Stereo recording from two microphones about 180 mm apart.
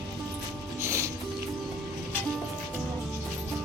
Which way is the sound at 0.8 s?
15° right (ahead or behind).